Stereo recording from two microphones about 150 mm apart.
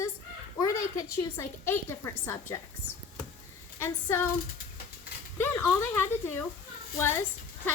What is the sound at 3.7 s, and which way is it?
Speech, 15° left (ahead or behind).